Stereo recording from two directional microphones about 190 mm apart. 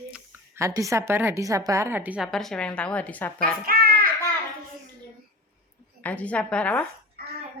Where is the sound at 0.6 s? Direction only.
15° right (ahead or behind); by 3.6 s 10° left (ahead or behind).